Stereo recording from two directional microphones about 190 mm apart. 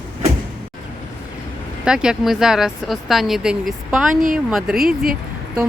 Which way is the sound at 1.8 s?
5° right (ahead or behind).